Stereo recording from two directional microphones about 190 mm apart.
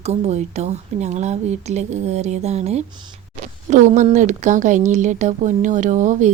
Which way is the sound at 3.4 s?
40° right (ahead or behind).